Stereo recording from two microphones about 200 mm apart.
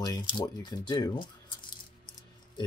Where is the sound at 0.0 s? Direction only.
20° left (ahead or behind).